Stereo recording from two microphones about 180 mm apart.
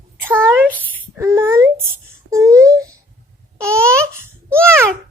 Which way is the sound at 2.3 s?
20° right (ahead or behind).